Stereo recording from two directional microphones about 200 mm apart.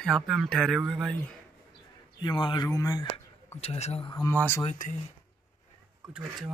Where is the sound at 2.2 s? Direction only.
20° left (ahead or behind).